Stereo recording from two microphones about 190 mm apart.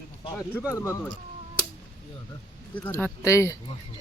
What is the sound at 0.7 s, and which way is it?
Speech, 15° left (ahead or behind).